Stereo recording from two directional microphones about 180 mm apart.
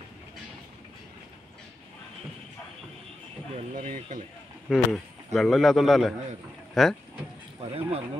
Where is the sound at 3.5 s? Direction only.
35° right (ahead or behind).